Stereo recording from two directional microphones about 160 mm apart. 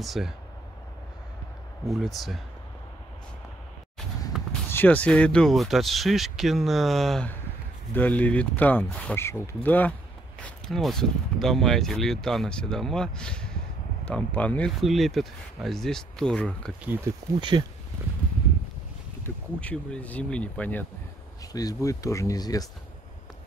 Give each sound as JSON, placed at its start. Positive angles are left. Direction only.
{"t": 0.0, "sound": "speech", "side_deg": 0}
{"t": 2.1, "sound": "speech", "side_deg": 0}
{"t": 4.3, "sound": "basketball bounce", "side_deg": 0}
{"t": 4.6, "sound": "speech", "side_deg": 10}
{"t": 17.1, "sound": "speech", "side_deg": -15}
{"t": 17.4, "sound": "speech", "side_deg": -30}
{"t": 19.2, "sound": "speech", "side_deg": 10}
{"t": 21.5, "sound": "speech", "side_deg": 25}